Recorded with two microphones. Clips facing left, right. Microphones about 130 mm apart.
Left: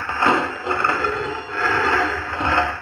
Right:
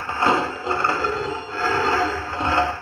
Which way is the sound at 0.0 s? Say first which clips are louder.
Left 1 dB; 35° right (ahead or behind).